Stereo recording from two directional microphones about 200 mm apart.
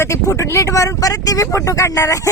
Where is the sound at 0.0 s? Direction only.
15° left (ahead or behind).